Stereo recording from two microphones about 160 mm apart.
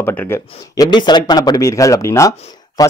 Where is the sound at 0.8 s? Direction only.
30° left (ahead or behind).